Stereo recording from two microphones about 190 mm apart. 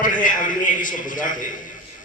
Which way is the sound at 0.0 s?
45° left (ahead or behind).